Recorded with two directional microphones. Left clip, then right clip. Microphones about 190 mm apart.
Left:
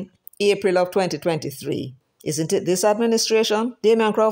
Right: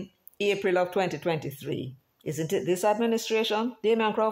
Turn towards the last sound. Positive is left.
turn(degrees=35)  # may be behind; listen again after turning